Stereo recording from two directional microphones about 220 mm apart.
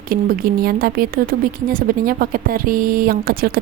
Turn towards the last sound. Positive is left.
turn(degrees=-40)  # may be behind; listen again after turning